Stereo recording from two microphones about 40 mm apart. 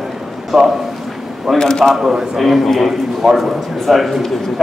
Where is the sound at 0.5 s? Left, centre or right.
Centre.